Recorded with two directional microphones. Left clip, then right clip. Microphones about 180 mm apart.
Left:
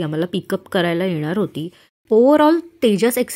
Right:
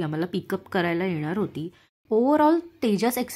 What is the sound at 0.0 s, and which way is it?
A woman's voice, 15° left (ahead or behind).